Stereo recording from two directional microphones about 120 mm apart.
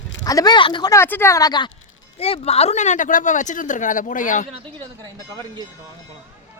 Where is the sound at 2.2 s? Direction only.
55° left (ahead or behind); by 4.5 s 90° left.